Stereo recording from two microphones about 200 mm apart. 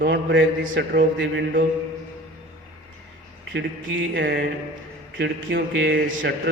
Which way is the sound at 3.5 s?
65° right (ahead or behind).